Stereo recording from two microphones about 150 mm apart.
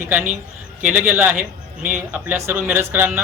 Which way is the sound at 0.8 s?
10° right (ahead or behind).